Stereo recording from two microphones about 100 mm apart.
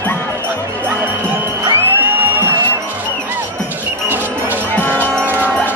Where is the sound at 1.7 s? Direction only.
20° right (ahead or behind).